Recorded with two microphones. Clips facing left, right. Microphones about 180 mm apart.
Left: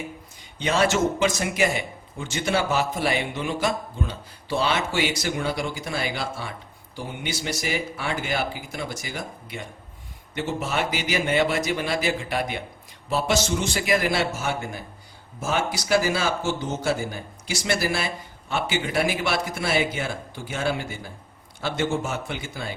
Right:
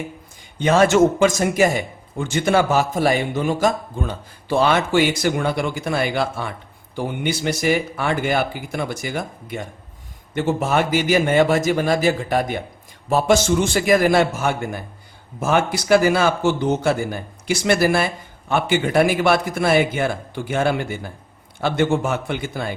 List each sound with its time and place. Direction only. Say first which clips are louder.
0.6 s a man's voice: right 7 dB; 50° right (ahead or behind)